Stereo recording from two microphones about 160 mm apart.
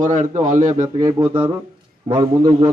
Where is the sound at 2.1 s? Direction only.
30° right (ahead or behind).